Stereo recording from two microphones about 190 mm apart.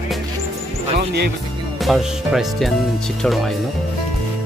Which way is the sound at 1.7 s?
Centre (ahead or behind).